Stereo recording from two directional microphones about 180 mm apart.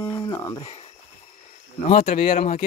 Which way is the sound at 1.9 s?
50° left (ahead or behind).